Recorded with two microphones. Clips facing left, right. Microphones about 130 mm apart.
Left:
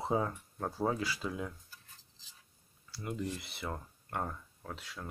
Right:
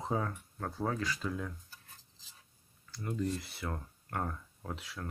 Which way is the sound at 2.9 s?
10° left (ahead or behind).